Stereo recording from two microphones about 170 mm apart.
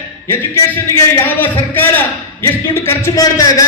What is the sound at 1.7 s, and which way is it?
A man's voice, 10° left (ahead or behind).